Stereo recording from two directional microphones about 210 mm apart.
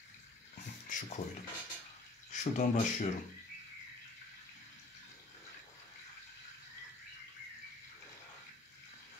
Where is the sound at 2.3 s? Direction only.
35° left (ahead or behind).